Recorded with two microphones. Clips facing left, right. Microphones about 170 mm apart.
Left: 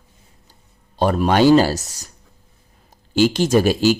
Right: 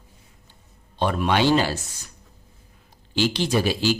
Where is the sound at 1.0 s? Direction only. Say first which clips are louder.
Left 6 dB; 40° left (ahead or behind).